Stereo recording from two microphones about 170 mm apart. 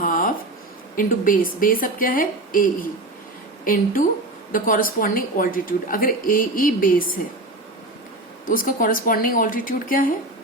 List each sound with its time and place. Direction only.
0.0 s a sound: 55° left (ahead or behind)
0.9 s a woman's voice: 55° left (ahead or behind)
8.4 s a woman's voice: 55° left (ahead or behind)